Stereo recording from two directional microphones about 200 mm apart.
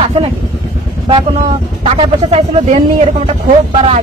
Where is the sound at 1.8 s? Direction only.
30° right (ahead or behind).